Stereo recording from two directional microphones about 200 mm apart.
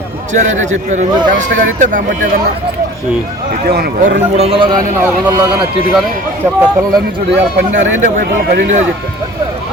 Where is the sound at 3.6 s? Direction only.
50° right (ahead or behind); by 5.7 s 20° right (ahead or behind).